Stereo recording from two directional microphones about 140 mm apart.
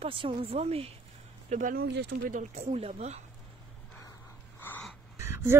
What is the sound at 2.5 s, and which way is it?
Speech, 50° right (ahead or behind).